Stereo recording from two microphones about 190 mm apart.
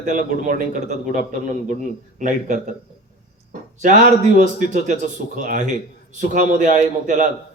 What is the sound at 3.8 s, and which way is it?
A man's voice, 40° right (ahead or behind).